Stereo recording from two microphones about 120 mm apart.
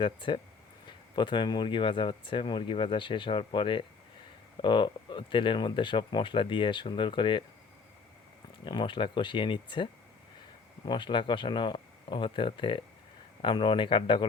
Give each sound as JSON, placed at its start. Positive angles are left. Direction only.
{"t": 0.0, "sound": "speech", "side_deg": 45}
{"t": 8.6, "sound": "speech", "side_deg": 40}